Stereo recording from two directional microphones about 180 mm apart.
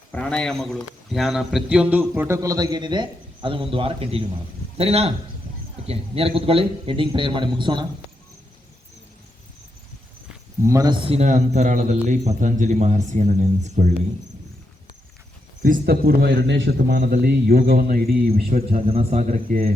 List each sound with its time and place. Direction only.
0.1 s a man's voice: 5° left (ahead or behind); by 7.9 s 25° right (ahead or behind)
10.6 s a man's voice: 20° right (ahead or behind); by 13.9 s 40° right (ahead or behind)
15.6 s a man's voice: 55° right (ahead or behind)
18.9 s a man's voice: 35° right (ahead or behind)
19.3 s speech: 50° right (ahead or behind)